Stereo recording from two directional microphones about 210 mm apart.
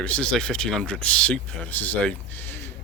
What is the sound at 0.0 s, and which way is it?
A man's voice, 5° left (ahead or behind).